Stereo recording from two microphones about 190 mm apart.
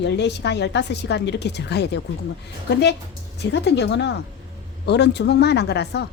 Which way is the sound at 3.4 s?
65° left (ahead or behind).